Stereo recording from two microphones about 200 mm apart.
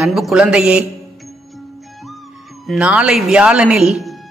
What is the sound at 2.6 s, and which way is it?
Speech, 5° right (ahead or behind).